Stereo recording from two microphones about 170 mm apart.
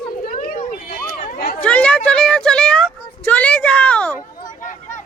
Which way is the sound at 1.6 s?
5° left (ahead or behind).